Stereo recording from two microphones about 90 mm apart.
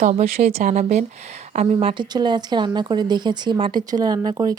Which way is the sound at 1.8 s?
60° right (ahead or behind).